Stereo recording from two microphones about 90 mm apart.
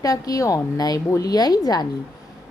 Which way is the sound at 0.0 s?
45° left (ahead or behind).